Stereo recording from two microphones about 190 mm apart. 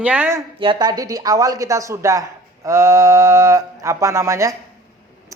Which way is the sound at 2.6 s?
15° right (ahead or behind).